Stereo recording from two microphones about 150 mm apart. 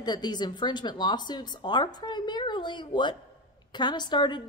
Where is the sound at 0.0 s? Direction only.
30° left (ahead or behind).